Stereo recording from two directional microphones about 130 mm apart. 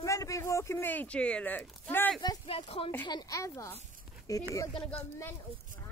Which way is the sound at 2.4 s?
50° left (ahead or behind).